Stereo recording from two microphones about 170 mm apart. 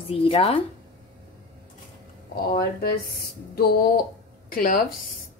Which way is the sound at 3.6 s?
65° left (ahead or behind).